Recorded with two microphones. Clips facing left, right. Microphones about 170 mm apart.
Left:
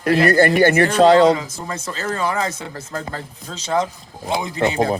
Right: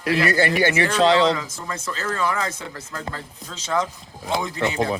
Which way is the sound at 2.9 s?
40° left (ahead or behind).